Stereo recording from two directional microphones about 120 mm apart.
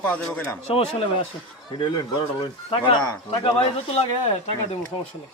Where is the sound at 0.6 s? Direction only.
55° left (ahead or behind).